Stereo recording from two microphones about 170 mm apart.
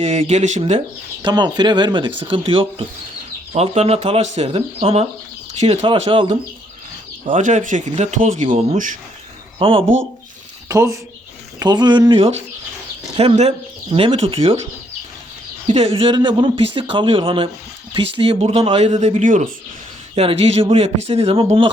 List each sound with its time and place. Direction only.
0.0 s speech: 40° right (ahead or behind)
1.2 s speech: 25° right (ahead or behind)
7.3 s speech: 45° right (ahead or behind)
9.6 s speech: 35° right (ahead or behind)
10.7 s speech: 20° right (ahead or behind); by 14.6 s 35° right (ahead or behind)
15.6 s speech: 35° right (ahead or behind)